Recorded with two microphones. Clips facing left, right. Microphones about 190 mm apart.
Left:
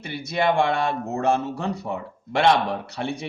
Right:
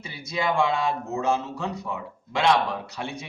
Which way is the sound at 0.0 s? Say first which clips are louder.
Left 5 dB; 65° left (ahead or behind).